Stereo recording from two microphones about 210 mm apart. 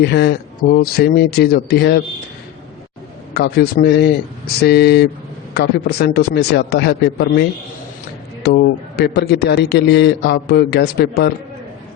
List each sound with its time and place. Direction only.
0.0 s a man's voice: 50° left (ahead or behind)
3.3 s a man's voice: 50° left (ahead or behind)
8.4 s a man's voice: 50° left (ahead or behind)